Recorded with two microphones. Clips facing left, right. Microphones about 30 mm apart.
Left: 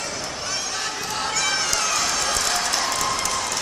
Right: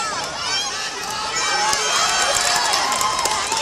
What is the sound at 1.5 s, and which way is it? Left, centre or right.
Run, centre.